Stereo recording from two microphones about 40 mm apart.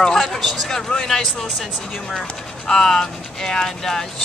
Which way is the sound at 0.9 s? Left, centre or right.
Centre.